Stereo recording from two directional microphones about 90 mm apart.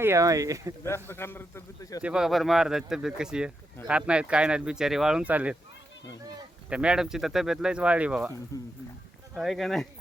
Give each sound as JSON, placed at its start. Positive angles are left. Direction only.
{"t": 0.0, "sound": "speech", "side_deg": -35}
{"t": 0.9, "sound": "a man's voice", "side_deg": 30}
{"t": 2.0, "sound": "speech", "side_deg": -10}
{"t": 6.7, "sound": "speech", "side_deg": -10}
{"t": 8.5, "sound": "speech", "side_deg": 40}
{"t": 9.3, "sound": "speech", "side_deg": 0}